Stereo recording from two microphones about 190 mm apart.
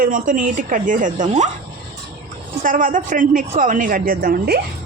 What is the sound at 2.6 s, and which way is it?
Speech, 45° right (ahead or behind).